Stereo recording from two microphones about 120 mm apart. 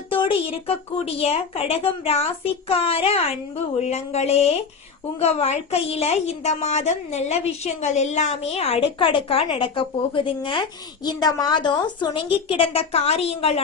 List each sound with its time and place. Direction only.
0.1 s a woman's voice: 50° left (ahead or behind)